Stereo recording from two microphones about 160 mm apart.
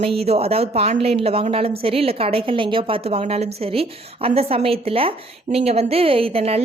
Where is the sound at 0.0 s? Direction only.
40° right (ahead or behind).